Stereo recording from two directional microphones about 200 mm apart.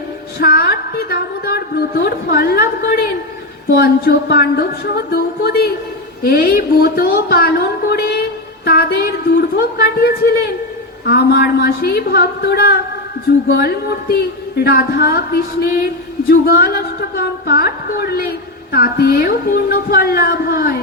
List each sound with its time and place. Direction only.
0.3 s a woman's voice: 50° left (ahead or behind)